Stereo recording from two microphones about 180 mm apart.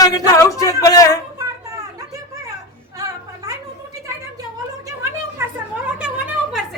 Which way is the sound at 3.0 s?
20° right (ahead or behind).